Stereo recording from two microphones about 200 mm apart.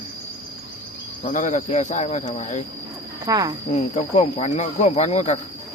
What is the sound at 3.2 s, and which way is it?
Speech, 20° right (ahead or behind).